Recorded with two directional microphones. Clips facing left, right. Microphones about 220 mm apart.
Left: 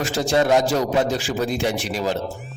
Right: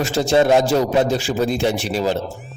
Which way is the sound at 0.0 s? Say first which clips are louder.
Right 4 dB; 25° right (ahead or behind).